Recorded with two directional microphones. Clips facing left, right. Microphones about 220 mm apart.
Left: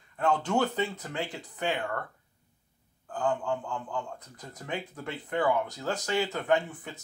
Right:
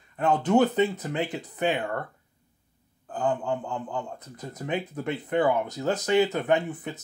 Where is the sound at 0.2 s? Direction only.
20° right (ahead or behind).